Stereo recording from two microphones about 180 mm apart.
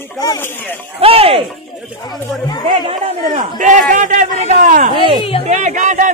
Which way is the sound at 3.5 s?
45° right (ahead or behind).